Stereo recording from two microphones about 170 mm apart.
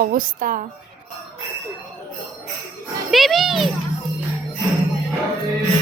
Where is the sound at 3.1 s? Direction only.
Centre (ahead or behind).